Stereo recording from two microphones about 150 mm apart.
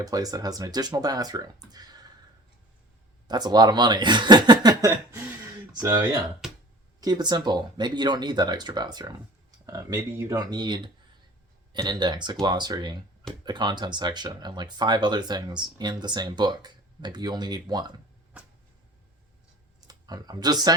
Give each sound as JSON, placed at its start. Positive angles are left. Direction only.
{"t": 0.0, "sound": "speech", "side_deg": -25}
{"t": 3.2, "sound": "speech", "side_deg": -25}
{"t": 18.3, "sound": "a sound", "side_deg": -5}
{"t": 19.9, "sound": "speech", "side_deg": -25}